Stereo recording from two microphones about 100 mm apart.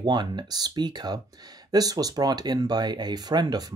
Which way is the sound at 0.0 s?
50° right (ahead or behind).